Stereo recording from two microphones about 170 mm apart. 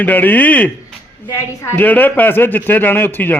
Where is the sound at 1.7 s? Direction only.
10° left (ahead or behind).